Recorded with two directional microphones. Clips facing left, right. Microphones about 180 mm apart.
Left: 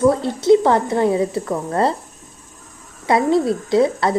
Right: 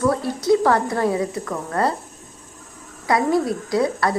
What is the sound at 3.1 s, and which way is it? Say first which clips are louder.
A woman's voice: left 3 dB; 25° left (ahead or behind).